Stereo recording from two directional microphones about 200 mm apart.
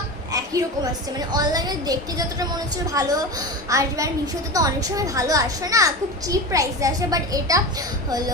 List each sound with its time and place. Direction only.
1.3 s a woman's voice: 20° right (ahead or behind)